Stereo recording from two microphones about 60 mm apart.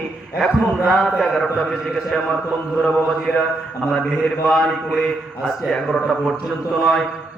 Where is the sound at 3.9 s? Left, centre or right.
Centre.